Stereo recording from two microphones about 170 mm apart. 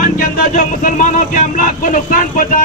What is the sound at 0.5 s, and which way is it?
A man's voice, 50° left (ahead or behind).